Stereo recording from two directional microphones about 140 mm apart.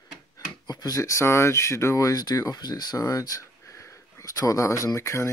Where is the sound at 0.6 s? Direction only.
30° left (ahead or behind).